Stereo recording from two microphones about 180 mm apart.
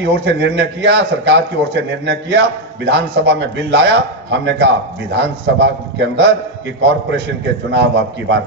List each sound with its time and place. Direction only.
0.0 s a man's voice: 75° right (ahead or behind)